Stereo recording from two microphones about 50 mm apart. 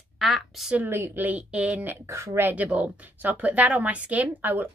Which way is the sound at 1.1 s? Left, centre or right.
Right.